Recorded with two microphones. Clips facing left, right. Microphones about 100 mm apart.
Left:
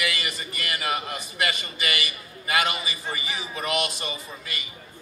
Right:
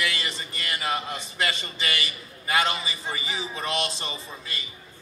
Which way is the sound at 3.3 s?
25° right (ahead or behind).